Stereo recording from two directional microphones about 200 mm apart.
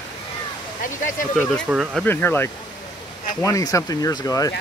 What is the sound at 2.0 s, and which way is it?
Speech, 10° left (ahead or behind).